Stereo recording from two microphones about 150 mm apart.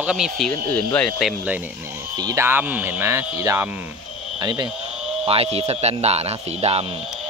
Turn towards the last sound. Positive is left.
turn(degrees=-40)  # may be behind; listen again after turning